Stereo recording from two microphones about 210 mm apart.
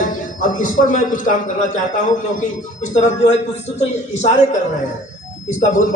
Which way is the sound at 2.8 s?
35° left (ahead or behind).